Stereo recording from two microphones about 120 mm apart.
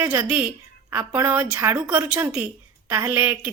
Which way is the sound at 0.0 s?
20° right (ahead or behind).